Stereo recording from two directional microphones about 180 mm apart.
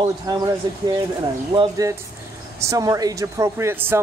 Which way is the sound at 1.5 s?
20° right (ahead or behind).